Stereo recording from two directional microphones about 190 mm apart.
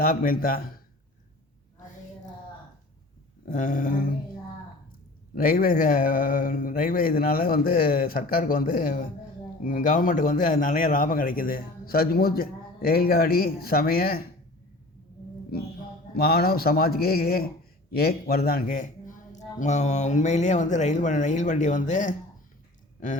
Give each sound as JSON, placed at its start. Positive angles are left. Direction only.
{"t": 0.0, "sound": "a man's voice", "side_deg": 50}
{"t": 3.4, "sound": "a man's voice", "side_deg": 45}
{"t": 5.3, "sound": "a man's voice", "side_deg": 50}
{"t": 16.1, "sound": "a man's voice", "side_deg": 55}